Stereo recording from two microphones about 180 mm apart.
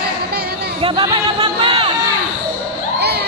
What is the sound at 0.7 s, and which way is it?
Music, 25° right (ahead or behind).